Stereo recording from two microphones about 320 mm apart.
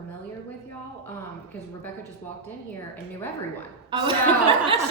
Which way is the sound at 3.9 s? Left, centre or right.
Centre.